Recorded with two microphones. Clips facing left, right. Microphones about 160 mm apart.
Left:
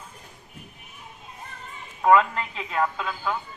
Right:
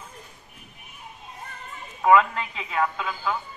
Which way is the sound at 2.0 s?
Centre (ahead or behind).